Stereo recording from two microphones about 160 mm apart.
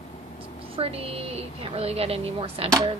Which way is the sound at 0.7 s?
35° right (ahead or behind).